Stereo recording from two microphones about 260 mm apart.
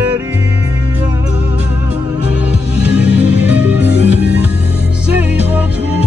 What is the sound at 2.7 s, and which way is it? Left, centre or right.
Music, centre.